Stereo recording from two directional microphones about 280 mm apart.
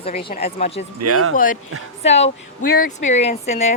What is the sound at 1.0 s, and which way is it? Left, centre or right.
Speech, right.